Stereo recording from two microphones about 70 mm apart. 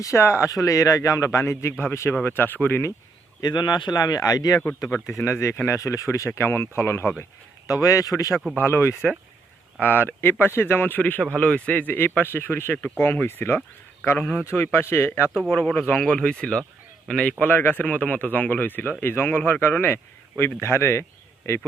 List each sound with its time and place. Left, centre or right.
0.0 s speech: left
1.4 s speech: left
3.4 s speech: left
5.0 s speech: left
7.7 s speech: left
8.5 s speech: left
9.8 s speech: left
14.2 s speech: left
14.5 s speech: left
15.8 s speech: left
17.4 s speech: left